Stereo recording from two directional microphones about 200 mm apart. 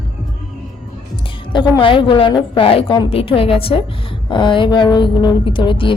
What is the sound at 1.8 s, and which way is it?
A woman's voice, 25° left (ahead or behind).